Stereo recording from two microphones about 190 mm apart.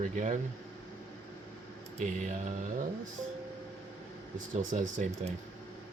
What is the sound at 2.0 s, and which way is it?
Speech, 40° right (ahead or behind).